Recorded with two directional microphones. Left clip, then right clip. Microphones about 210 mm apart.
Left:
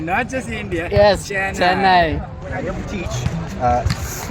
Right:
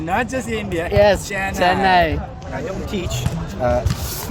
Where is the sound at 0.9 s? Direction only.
10° left (ahead or behind).